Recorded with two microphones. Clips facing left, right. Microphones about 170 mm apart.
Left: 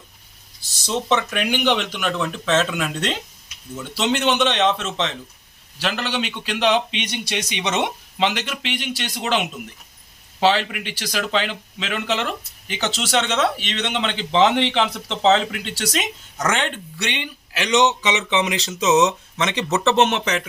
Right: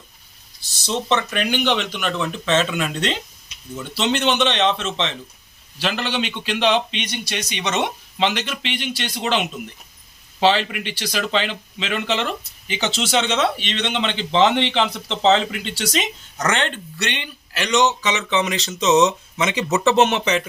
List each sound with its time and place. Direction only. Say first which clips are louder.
0.9 s speech: even; 5° left (ahead or behind)
7.0 s speech: left 1 dB; 20° left (ahead or behind); by 20.5 s centre (ahead or behind)